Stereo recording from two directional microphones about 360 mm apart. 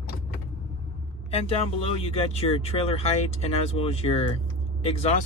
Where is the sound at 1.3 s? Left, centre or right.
Centre.